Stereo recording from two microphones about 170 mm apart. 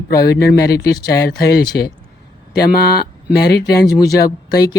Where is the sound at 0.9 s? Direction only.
20° left (ahead or behind).